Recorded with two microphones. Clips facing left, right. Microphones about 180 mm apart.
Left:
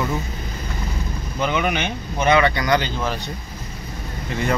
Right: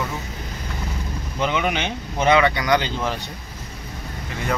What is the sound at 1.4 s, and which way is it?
Speech, 20° right (ahead or behind).